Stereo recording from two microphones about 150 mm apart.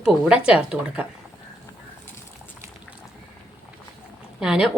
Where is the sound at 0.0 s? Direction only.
5° right (ahead or behind).